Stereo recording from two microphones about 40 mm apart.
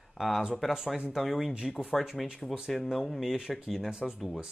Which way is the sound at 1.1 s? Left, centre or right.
Centre.